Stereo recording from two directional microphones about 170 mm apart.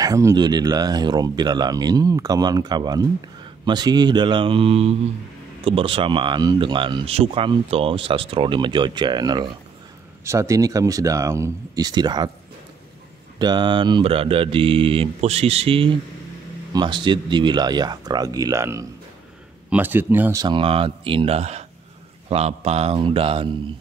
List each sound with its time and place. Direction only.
0.0 s speech: 20° right (ahead or behind)
13.4 s mantra: 25° right (ahead or behind)
16.7 s speech: 25° right (ahead or behind)
20.4 s mantra: 30° right (ahead or behind)